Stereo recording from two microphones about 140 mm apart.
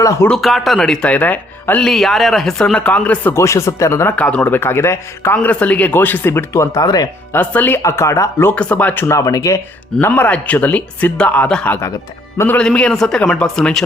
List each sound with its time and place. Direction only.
0.0 s speech: 25° left (ahead or behind)
0.3 s speech: centre (ahead or behind); by 7.1 s 25° left (ahead or behind)
7.3 s speech: 15° left (ahead or behind)
10.0 s speech: 10° left (ahead or behind)